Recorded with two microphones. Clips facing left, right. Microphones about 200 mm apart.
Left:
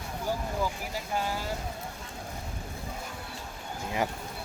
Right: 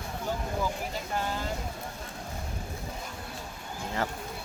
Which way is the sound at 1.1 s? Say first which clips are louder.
Left 1 dB; 10° left (ahead or behind).